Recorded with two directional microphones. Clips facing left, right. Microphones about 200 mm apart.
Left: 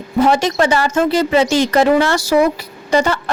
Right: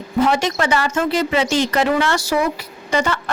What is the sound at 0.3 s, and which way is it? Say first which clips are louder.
A woman's voice: left 4 dB; 35° left (ahead or behind).